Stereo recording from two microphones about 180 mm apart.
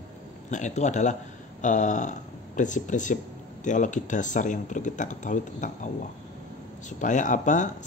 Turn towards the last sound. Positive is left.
turn(degrees=45)  # may be behind; listen again after turning